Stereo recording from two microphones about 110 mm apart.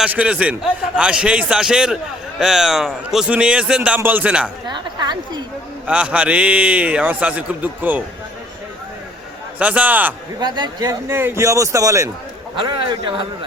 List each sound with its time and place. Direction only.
0.0 s a man's voice: 10° right (ahead or behind)
4.6 s a woman's voice: 40° right (ahead or behind)
5.9 s a man's voice: 10° right (ahead or behind)
9.6 s a man's voice: 10° right (ahead or behind)
10.4 s a woman's voice: 45° right (ahead or behind)
11.1 s a man's voice: 20° right (ahead or behind)
12.5 s a man's voice: 45° right (ahead or behind)